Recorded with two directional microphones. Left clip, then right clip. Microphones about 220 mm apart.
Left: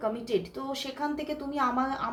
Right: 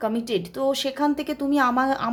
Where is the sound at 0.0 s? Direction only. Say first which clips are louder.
Right 4 dB; 45° right (ahead or behind).